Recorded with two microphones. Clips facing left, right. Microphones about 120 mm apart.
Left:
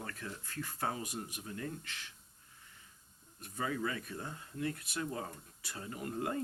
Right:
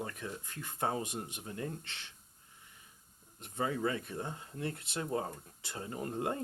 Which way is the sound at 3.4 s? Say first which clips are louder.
Right 3 dB; 25° right (ahead or behind).